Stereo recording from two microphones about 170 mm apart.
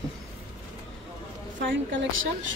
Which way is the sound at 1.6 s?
90° right.